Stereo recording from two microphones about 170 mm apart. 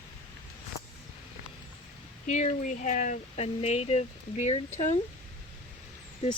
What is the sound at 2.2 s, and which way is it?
Speech, 45° left (ahead or behind).